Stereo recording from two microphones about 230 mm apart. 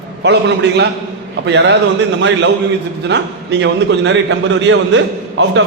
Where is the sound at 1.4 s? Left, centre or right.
Right.